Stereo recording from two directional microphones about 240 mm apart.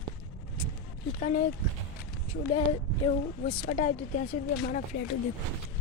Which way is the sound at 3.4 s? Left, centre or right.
Left.